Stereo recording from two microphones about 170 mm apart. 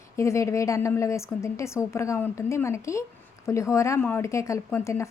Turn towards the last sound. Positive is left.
turn(degrees=15)  # may be behind; listen again after turning